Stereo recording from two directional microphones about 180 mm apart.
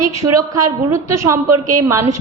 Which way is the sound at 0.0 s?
20° right (ahead or behind).